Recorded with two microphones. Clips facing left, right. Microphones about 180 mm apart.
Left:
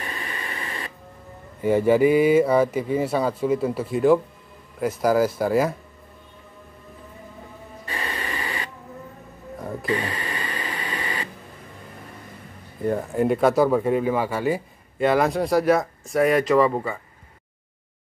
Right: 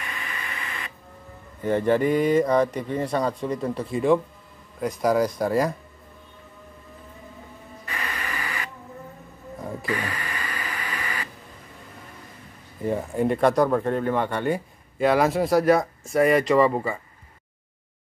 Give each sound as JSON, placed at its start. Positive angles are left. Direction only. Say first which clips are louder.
{"t": 0.0, "sound": "radio", "louder": "left 3 dB", "side_deg": 35}
{"t": 1.6, "sound": "speech", "louder": "left 4 dB", "side_deg": 10}
{"t": 7.8, "sound": "printer", "louder": "left 2 dB", "side_deg": 30}
{"t": 9.6, "sound": "a sound", "louder": "left 2 dB", "side_deg": 0}
{"t": 9.8, "sound": "radio", "louder": "left 4 dB", "side_deg": 25}
{"t": 12.8, "sound": "speech", "louder": "left 2 dB", "side_deg": 0}